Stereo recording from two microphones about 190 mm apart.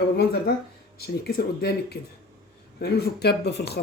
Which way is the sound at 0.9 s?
55° left (ahead or behind).